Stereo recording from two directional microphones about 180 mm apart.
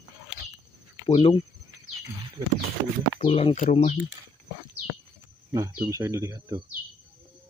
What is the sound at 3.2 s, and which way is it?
Speech, 30° left (ahead or behind).